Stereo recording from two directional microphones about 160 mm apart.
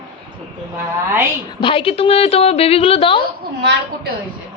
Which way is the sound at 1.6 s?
35° left (ahead or behind).